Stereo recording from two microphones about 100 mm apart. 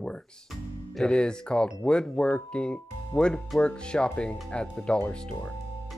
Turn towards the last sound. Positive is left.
turn(degrees=10)  # may be behind; listen again after turning